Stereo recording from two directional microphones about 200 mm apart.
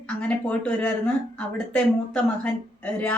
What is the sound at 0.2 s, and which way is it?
Speech, 5° left (ahead or behind).